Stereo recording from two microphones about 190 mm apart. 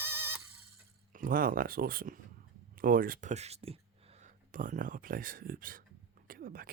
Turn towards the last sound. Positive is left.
turn(degrees=-50)  # may be behind; listen again after turning